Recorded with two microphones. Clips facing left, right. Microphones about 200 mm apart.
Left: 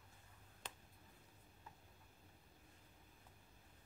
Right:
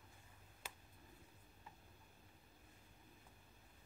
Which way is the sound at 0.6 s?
10° right (ahead or behind).